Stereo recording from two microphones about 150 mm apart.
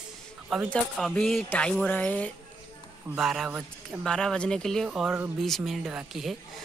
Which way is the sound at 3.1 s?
Centre (ahead or behind).